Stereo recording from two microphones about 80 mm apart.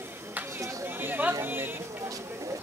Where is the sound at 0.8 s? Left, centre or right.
Right.